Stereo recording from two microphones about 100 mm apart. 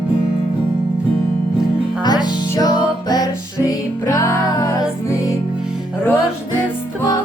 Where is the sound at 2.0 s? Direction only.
45° left (ahead or behind).